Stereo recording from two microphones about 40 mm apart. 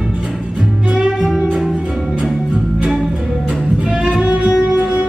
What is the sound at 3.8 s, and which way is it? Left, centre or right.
Music, right.